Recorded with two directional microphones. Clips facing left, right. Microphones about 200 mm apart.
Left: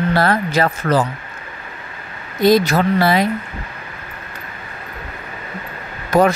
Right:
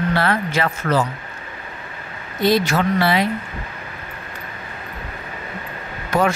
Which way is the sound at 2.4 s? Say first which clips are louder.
Left 4 dB; 40° left (ahead or behind).